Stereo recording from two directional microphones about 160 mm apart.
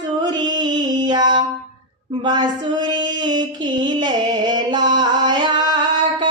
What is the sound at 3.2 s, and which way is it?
Music, 30° right (ahead or behind).